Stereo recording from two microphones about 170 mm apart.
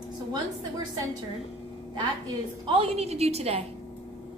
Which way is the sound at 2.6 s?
35° right (ahead or behind).